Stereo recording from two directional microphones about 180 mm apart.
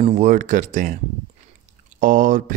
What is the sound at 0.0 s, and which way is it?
Speech, 45° right (ahead or behind).